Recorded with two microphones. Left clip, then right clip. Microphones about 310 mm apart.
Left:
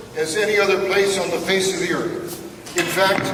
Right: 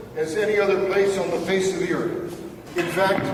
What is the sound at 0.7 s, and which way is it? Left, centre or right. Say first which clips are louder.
Speech: left 2 dB; centre.